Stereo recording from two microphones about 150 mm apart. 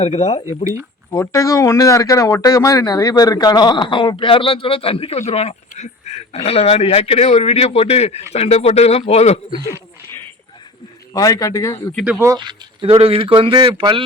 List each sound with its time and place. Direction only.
0.0 s a man's voice: 50° left (ahead or behind)
0.4 s speech: 20° right (ahead or behind)
1.1 s a man's voice: 20° left (ahead or behind); by 9.4 s 45° left (ahead or behind)
11.1 s a man's voice: 25° left (ahead or behind)
12.0 s speech: 20° right (ahead or behind)
12.4 s speech: 35° right (ahead or behind)